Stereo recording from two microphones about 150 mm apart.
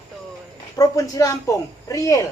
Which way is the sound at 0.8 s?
25° left (ahead or behind).